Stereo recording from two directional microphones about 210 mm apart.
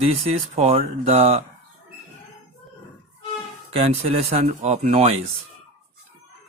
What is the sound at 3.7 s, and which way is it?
Speech, 30° right (ahead or behind).